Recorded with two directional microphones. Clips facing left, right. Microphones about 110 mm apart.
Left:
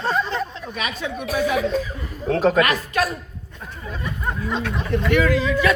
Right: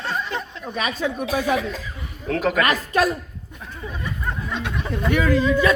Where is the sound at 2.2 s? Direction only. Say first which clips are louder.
Left 4 dB; 30° left (ahead or behind).